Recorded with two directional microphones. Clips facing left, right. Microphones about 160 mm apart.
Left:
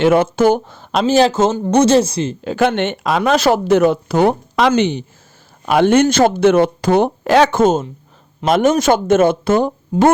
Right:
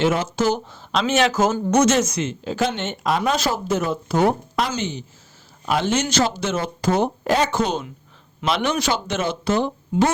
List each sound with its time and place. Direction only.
0.0 s speech: 55° left (ahead or behind)
1.0 s a woman's voice: 35° left (ahead or behind)
2.4 s speech: 60° left (ahead or behind)
7.5 s speech: 45° left (ahead or behind)